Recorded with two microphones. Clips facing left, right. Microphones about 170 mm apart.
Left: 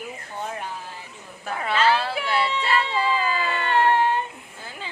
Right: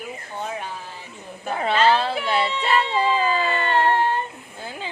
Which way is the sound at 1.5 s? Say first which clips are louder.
Right 3 dB; 25° right (ahead or behind).